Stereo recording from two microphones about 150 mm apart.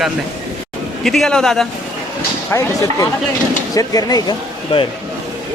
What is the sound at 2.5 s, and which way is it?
Speech, 20° left (ahead or behind).